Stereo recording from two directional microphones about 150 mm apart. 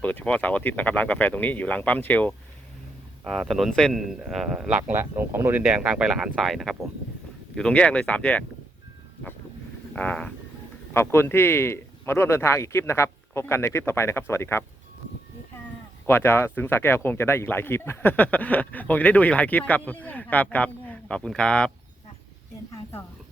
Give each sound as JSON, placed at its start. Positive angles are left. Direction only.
{"t": 0.0, "sound": "speech", "side_deg": 10}
{"t": 3.2, "sound": "a man's voice", "side_deg": 0}
{"t": 9.9, "sound": "speech", "side_deg": 10}
{"t": 16.0, "sound": "speech", "side_deg": 15}
{"t": 22.7, "sound": "speech", "side_deg": 15}